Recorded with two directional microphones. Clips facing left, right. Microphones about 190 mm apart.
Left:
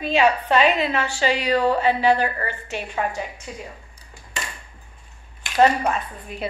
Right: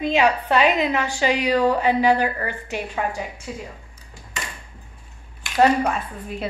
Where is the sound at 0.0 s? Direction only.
15° right (ahead or behind).